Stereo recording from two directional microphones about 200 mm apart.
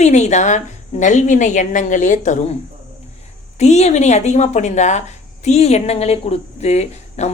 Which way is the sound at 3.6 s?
35° left (ahead or behind).